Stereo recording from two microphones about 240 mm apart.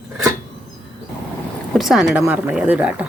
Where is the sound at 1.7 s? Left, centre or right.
Centre.